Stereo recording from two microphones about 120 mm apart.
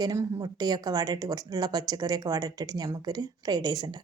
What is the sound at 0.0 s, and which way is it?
Speech, 30° right (ahead or behind).